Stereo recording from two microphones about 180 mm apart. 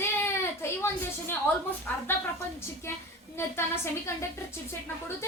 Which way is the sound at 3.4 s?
15° left (ahead or behind).